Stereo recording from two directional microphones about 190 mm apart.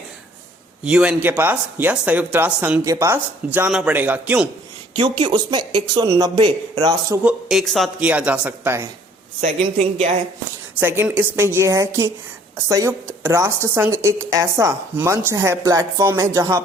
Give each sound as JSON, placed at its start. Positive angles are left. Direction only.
{"t": 0.9, "sound": "a woman's voice", "side_deg": -5}
{"t": 4.9, "sound": "speech", "side_deg": -25}
{"t": 7.3, "sound": "a woman's voice", "side_deg": 0}
{"t": 9.4, "sound": "a woman's voice", "side_deg": -35}
{"t": 10.8, "sound": "a woman's voice", "side_deg": -10}